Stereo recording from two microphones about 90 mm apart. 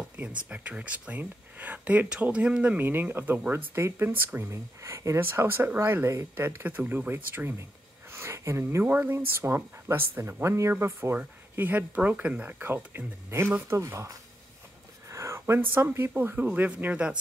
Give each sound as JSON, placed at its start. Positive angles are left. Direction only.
{"t": 0.5, "sound": "speech", "side_deg": -15}